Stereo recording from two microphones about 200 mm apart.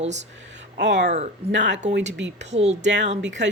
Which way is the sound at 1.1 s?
30° right (ahead or behind).